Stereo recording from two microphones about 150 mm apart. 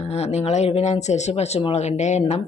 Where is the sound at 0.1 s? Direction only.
45° left (ahead or behind).